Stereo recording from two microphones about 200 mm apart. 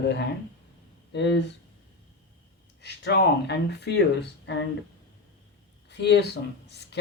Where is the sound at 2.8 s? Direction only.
60° left (ahead or behind).